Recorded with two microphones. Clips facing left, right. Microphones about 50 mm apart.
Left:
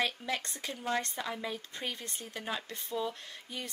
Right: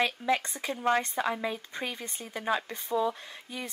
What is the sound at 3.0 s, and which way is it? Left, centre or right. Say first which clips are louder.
Speech: right 6 dB; centre.